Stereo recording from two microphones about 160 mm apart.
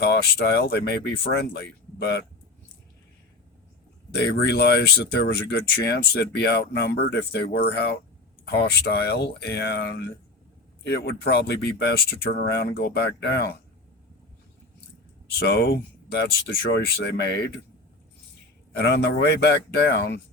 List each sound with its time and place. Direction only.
0.0 s speech: 90° left
4.2 s speech: 90° left
10.8 s speech: 90° left
15.4 s speech: 85° left
18.8 s speech: 90° left